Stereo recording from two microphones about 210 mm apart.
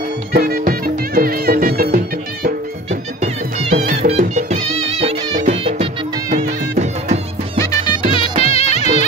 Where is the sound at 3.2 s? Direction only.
35° right (ahead or behind).